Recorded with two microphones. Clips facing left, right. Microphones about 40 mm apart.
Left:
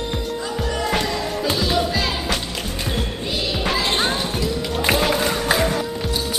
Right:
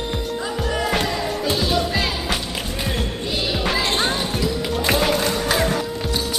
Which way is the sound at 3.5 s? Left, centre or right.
Centre.